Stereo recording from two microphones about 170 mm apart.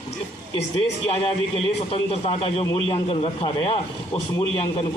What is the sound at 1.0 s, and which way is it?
A man's voice, 35° left (ahead or behind).